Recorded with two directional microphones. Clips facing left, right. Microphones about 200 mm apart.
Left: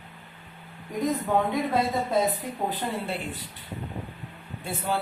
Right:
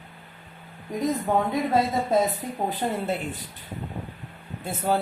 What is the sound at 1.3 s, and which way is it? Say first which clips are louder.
Speech: right 1 dB; 45° right (ahead or behind).